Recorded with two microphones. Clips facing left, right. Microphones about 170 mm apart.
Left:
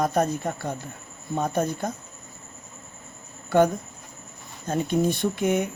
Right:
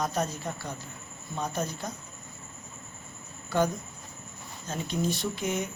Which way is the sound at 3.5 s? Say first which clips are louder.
Left 7 dB; 60° left (ahead or behind).